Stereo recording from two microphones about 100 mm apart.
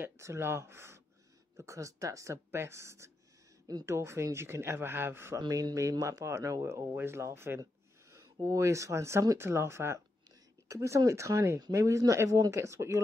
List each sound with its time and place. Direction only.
0.0 s speech: 25° right (ahead or behind)
5.5 s speech: 35° right (ahead or behind)